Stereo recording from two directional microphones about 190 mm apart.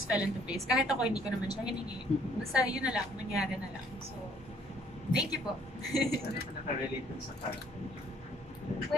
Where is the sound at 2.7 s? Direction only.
5° right (ahead or behind).